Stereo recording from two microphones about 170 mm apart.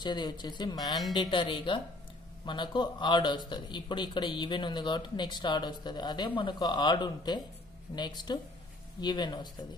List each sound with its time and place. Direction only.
0.0 s a man's voice: 25° left (ahead or behind)